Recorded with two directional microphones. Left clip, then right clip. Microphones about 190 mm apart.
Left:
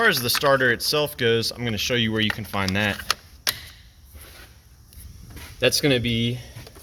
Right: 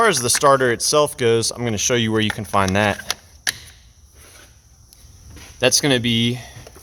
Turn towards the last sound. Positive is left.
turn(degrees=-50)  # may be behind; listen again after turning